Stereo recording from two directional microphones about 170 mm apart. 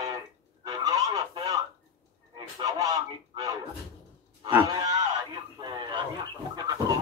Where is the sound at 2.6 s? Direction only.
20° right (ahead or behind).